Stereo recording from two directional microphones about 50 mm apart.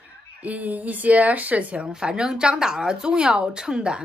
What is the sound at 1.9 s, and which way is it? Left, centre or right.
Speech, centre.